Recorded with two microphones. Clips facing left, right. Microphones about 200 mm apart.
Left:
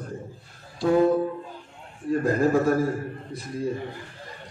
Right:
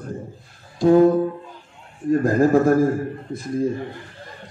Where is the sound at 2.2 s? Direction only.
45° right (ahead or behind).